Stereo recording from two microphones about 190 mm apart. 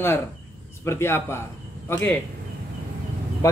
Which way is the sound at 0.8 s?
15° left (ahead or behind).